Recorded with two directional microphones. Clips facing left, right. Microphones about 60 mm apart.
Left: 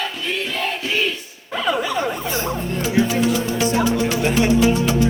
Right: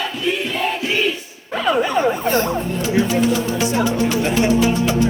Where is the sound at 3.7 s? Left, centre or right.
Right.